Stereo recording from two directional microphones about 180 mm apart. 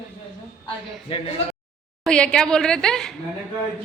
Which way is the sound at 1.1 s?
30° left (ahead or behind).